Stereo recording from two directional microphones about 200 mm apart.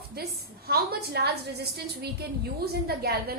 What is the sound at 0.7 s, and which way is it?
A woman's voice, 50° right (ahead or behind).